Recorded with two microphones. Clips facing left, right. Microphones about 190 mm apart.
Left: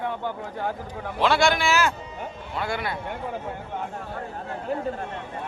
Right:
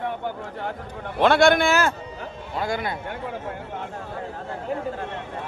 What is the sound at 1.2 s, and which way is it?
Speech, 55° right (ahead or behind).